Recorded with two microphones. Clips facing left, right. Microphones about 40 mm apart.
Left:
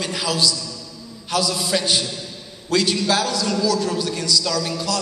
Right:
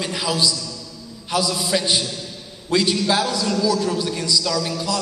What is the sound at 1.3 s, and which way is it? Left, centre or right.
A man's voice, centre.